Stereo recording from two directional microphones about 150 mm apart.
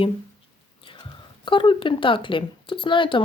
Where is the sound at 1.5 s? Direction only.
35° left (ahead or behind).